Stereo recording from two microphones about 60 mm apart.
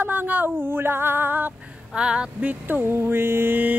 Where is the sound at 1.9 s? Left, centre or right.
Centre; by 3.7 s right.